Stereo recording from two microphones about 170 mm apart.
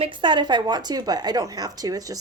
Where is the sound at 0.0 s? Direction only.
30° right (ahead or behind).